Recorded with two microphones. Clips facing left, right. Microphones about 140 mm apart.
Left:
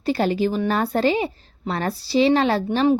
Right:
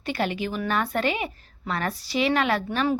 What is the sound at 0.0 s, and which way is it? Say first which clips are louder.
A woman's voice: left 7 dB; 35° left (ahead or behind).